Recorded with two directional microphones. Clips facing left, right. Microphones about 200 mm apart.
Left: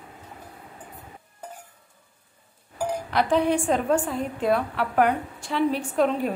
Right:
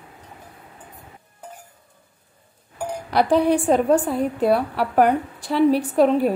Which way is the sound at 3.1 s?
35° right (ahead or behind).